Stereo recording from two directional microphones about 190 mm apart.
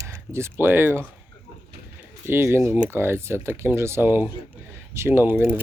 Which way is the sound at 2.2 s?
15° right (ahead or behind).